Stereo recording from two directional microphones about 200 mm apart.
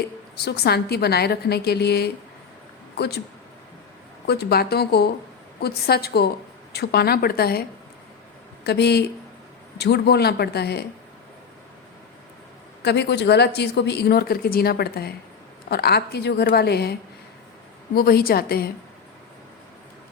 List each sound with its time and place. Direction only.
0.3 s a woman's voice: 55° left (ahead or behind)
4.3 s a woman's voice: 55° left (ahead or behind)
8.6 s a woman's voice: 55° left (ahead or behind)
12.8 s a woman's voice: 55° left (ahead or behind)